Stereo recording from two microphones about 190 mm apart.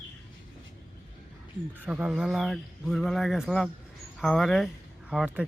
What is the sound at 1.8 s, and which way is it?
Speech, 5° right (ahead or behind).